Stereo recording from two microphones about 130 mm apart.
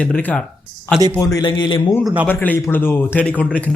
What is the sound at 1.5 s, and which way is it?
Speech, 40° left (ahead or behind).